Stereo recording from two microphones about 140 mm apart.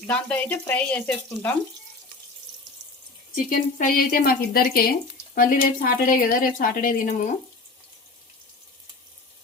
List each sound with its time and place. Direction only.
0.1 s speech: 10° left (ahead or behind)
3.3 s speech: 80° left